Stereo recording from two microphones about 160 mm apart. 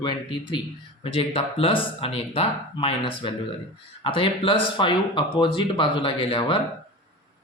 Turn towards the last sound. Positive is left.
turn(degrees=35)  # may be behind; listen again after turning